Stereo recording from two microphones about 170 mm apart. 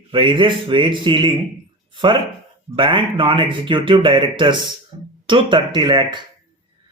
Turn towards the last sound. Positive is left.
turn(degrees=-25)  # may be behind; listen again after turning